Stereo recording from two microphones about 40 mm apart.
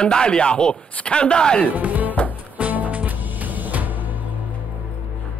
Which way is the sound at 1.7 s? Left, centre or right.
Right.